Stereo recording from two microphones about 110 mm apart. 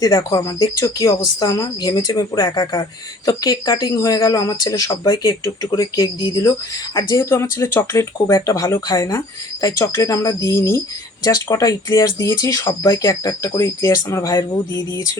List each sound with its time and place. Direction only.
0.0 s speech: 40° left (ahead or behind)
7.3 s speech: 25° left (ahead or behind)